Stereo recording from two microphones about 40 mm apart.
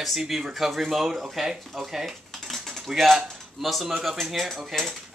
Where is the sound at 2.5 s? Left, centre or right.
Centre.